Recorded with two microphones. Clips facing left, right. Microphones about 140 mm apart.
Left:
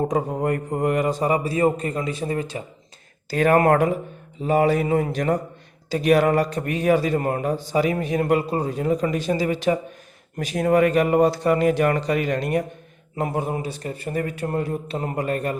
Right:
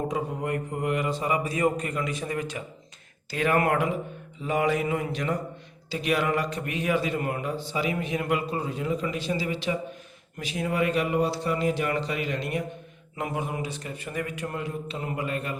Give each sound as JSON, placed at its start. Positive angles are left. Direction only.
{"t": 0.1, "sound": "a man's voice", "side_deg": 45}
{"t": 3.2, "sound": "a man's voice", "side_deg": 40}